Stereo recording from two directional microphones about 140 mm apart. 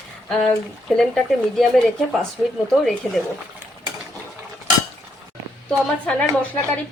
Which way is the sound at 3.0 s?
10° left (ahead or behind).